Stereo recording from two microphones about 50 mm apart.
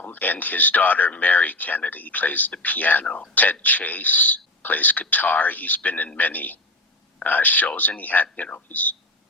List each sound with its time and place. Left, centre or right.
0.1 s speech: left